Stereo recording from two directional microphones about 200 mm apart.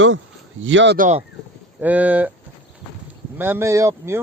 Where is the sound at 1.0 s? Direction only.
35° right (ahead or behind).